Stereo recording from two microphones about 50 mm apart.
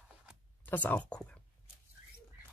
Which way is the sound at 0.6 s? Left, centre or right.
Left.